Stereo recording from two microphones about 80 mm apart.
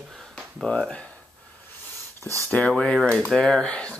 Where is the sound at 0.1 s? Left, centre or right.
Centre.